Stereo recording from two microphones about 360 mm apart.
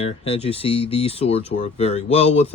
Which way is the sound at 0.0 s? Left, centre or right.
Centre.